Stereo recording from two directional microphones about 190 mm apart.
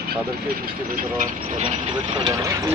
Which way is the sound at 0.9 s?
45° right (ahead or behind).